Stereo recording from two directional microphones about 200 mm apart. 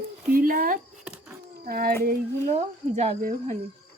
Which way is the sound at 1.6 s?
45° right (ahead or behind).